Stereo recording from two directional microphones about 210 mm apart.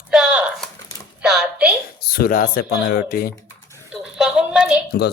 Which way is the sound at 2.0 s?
45° left (ahead or behind).